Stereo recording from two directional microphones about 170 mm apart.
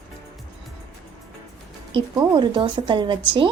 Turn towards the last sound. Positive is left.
turn(degrees=-30)  # may be behind; listen again after turning